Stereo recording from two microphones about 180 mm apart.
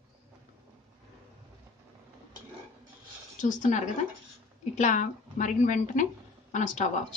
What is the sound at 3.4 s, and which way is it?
A woman's voice, 45° left (ahead or behind).